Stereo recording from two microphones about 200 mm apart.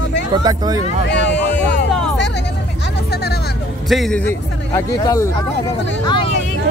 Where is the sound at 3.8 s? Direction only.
Centre (ahead or behind); by 5.3 s 15° left (ahead or behind).